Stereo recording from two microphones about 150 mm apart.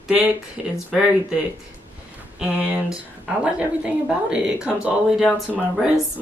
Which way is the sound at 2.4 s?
10° right (ahead or behind).